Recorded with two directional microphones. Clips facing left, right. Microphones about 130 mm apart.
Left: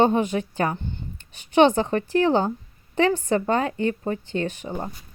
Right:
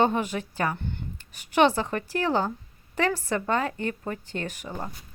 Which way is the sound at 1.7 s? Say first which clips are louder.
Left 7 dB; 35° left (ahead or behind).